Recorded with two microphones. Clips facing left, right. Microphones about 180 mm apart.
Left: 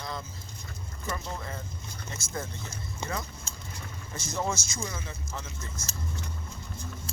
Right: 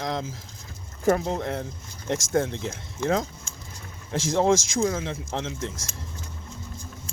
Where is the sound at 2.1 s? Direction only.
85° right.